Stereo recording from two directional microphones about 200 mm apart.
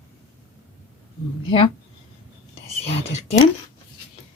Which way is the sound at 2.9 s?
30° left (ahead or behind).